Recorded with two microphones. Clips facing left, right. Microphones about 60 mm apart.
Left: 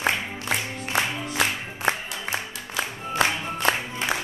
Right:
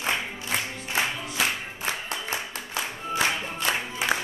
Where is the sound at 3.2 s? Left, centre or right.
Left.